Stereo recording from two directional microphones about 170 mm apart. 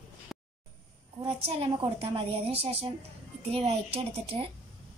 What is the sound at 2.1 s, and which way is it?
Speech, 35° right (ahead or behind).